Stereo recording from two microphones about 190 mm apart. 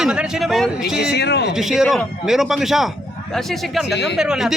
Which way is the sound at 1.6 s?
Centre (ahead or behind).